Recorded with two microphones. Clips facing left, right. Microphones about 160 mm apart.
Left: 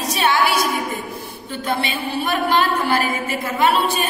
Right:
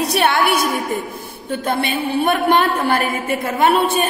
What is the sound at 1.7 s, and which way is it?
A woman's voice, 55° right (ahead or behind).